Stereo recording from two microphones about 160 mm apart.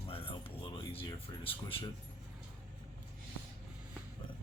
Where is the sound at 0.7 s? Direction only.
35° left (ahead or behind).